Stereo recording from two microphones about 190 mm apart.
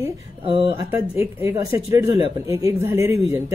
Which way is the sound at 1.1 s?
15° right (ahead or behind).